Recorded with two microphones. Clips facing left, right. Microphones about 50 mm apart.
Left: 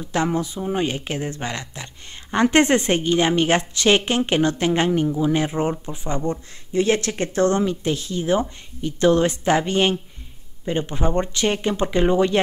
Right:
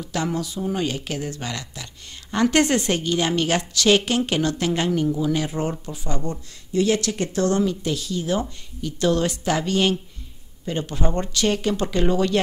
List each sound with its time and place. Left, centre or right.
0.0 s a woman's voice: left